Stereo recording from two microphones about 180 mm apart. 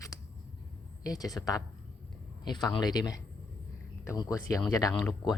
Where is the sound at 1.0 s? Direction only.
20° left (ahead or behind).